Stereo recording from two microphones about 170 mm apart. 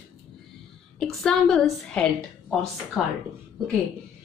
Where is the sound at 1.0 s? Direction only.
5° left (ahead or behind).